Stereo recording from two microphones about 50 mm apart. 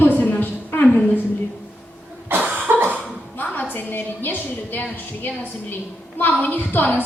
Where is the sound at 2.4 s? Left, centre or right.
Right.